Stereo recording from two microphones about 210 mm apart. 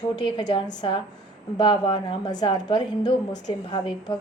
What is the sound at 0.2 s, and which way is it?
A woman's voice, 20° left (ahead or behind).